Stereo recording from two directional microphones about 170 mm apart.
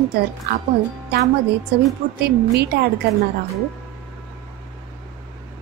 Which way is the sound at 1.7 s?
70° right (ahead or behind).